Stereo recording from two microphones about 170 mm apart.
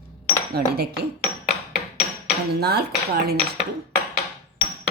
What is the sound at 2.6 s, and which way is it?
Speech, 70° right (ahead or behind).